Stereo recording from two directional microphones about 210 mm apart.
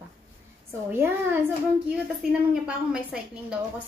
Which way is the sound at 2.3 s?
5° right (ahead or behind).